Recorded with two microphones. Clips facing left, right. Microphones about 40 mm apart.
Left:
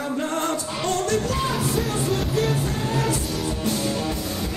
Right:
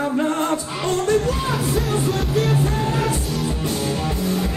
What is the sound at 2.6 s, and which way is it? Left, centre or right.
Music, centre.